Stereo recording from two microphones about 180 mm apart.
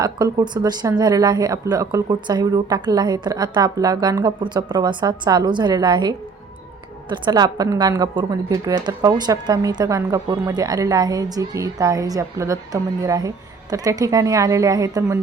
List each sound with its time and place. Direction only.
0.0 s speech: 25° right (ahead or behind)